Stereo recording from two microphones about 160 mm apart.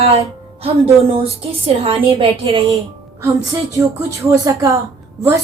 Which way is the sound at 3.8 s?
20° right (ahead or behind).